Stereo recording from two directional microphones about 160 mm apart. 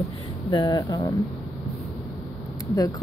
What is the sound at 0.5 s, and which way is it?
Speech, 25° left (ahead or behind).